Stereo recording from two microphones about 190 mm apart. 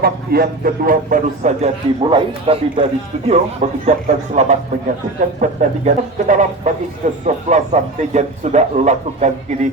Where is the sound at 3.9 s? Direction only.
35° right (ahead or behind).